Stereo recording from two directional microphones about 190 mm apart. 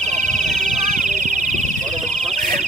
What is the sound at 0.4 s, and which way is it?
Music, centre (ahead or behind).